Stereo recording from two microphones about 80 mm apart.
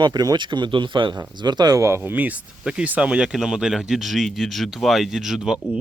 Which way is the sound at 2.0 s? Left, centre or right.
Right.